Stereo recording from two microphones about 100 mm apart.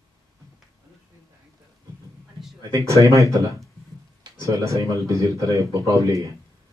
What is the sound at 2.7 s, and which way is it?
Speech, 30° right (ahead or behind).